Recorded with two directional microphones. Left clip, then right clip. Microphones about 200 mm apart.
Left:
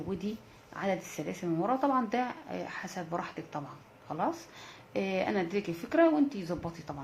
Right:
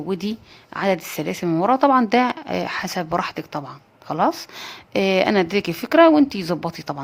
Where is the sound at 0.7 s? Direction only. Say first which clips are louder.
Right 12 dB; 50° right (ahead or behind).